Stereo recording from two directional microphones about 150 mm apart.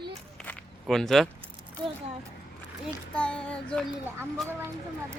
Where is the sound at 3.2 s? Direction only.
5° left (ahead or behind).